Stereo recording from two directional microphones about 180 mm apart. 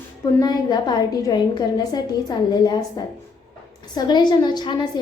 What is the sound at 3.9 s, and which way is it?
Speech, 25° left (ahead or behind).